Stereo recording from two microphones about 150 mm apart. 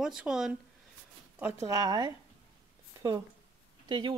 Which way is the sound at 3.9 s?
30° right (ahead or behind).